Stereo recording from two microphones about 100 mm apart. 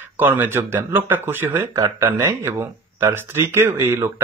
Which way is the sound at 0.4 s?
20° right (ahead or behind).